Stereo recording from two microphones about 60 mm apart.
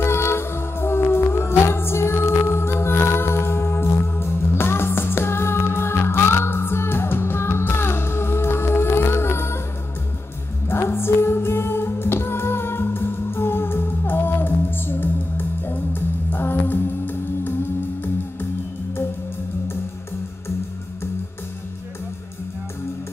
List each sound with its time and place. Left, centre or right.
0.0 s music: left
10.7 s music: left